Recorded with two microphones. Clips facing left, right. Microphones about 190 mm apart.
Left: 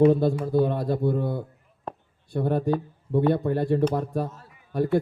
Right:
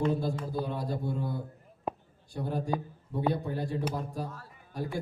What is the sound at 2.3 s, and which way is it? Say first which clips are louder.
Speech: left 8 dB; 60° left (ahead or behind).